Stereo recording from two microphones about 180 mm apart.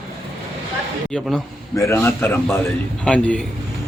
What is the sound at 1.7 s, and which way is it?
A man's voice, 15° left (ahead or behind).